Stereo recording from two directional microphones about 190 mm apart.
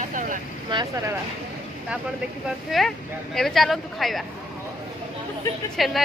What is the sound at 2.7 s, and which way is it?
Speech, centre (ahead or behind).